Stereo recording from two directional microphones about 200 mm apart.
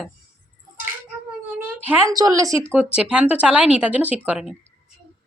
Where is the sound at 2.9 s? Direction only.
5° right (ahead or behind).